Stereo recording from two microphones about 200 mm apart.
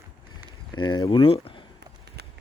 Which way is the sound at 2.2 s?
55° right (ahead or behind).